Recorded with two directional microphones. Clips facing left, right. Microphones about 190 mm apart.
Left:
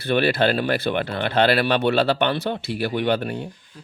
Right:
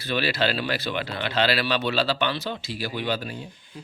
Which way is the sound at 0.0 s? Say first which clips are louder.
Left 6 dB; 55° left (ahead or behind).